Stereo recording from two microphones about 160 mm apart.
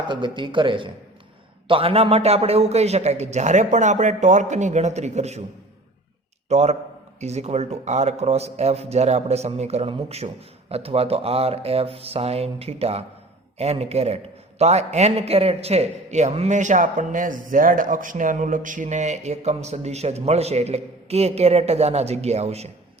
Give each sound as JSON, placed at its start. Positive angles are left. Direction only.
{"t": 0.1, "sound": "a man's voice", "side_deg": -30}
{"t": 6.5, "sound": "a man's voice", "side_deg": -45}